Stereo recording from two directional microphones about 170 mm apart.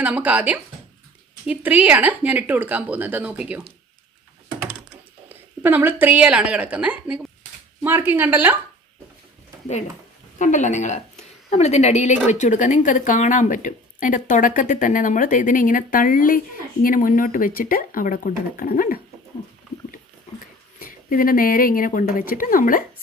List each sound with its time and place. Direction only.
0.0 s speech: 10° right (ahead or behind)
5.3 s speech: 10° right (ahead or behind)
10.3 s a woman's voice: 45° left (ahead or behind)
20.8 s speech: 55° left (ahead or behind)